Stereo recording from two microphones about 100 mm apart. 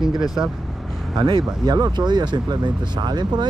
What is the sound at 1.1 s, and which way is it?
Speech, 50° right (ahead or behind).